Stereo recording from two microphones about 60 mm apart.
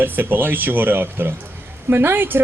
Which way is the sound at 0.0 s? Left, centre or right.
Right.